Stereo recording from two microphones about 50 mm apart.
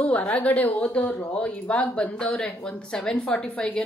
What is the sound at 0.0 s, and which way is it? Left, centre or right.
Speech, left.